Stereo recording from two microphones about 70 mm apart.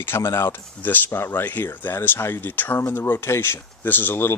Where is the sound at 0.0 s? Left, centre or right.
Left.